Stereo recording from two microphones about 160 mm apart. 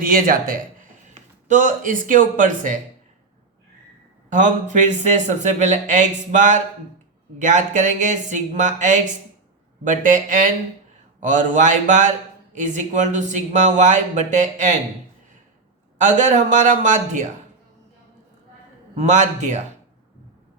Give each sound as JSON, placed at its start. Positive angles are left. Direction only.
{"t": 0.0, "sound": "speech", "side_deg": -60}
{"t": 0.8, "sound": "speech", "side_deg": -50}
{"t": 4.3, "sound": "speech", "side_deg": -50}
{"t": 16.0, "sound": "speech", "side_deg": -50}
{"t": 18.9, "sound": "speech", "side_deg": -50}